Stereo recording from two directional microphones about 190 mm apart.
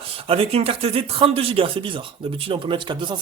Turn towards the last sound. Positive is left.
turn(degrees=-25)  # may be behind; listen again after turning